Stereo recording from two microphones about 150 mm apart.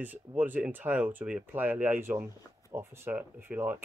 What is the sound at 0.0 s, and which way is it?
Speech, 10° right (ahead or behind).